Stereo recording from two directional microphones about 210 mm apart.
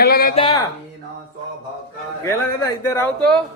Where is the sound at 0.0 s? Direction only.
45° left (ahead or behind).